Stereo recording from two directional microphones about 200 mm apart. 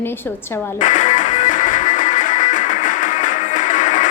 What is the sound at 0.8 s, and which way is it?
Music, 40° left (ahead or behind).